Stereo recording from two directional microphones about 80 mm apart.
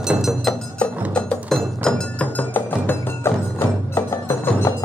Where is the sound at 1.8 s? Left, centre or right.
Centre.